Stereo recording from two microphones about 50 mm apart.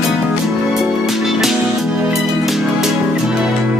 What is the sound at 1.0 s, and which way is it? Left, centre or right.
Music, centre.